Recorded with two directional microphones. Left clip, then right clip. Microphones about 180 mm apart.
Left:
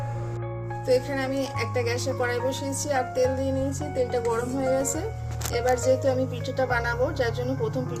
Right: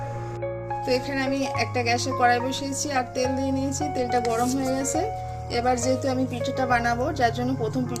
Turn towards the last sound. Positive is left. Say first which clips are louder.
# right 3 dB
turn(degrees=-50)  # may be behind; listen again after turning